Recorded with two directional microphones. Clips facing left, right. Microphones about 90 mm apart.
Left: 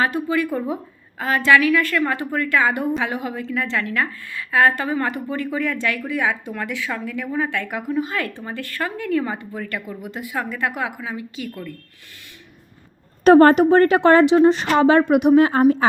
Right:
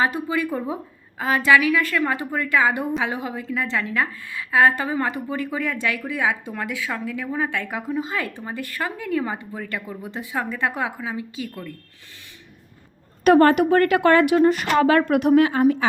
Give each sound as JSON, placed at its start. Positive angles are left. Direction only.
{"t": 0.0, "sound": "a woman's voice", "side_deg": -20}
{"t": 13.2, "sound": "a woman's voice", "side_deg": 30}
{"t": 15.4, "sound": "a woman's voice", "side_deg": 40}